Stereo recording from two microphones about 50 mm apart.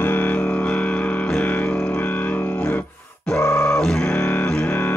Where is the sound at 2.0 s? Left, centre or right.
Left.